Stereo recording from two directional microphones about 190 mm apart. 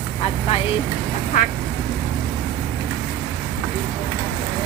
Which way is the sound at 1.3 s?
45° left (ahead or behind).